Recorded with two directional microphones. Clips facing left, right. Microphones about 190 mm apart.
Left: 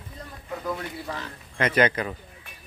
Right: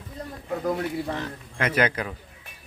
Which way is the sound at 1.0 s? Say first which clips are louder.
Right 4 dB; 25° right (ahead or behind).